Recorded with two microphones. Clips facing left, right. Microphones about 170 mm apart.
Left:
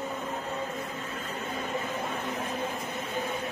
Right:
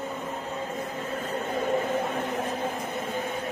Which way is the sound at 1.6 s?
55° right (ahead or behind).